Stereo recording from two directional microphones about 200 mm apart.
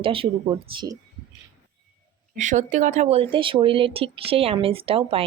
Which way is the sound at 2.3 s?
40° right (ahead or behind).